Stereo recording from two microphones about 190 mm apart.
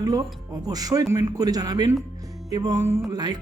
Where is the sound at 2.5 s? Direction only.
20° right (ahead or behind).